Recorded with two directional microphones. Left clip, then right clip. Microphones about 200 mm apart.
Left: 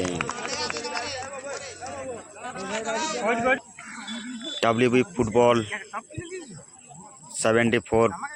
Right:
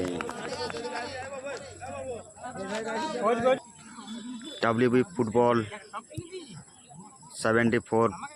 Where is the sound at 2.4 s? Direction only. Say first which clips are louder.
Left 4 dB; 55° right (ahead or behind).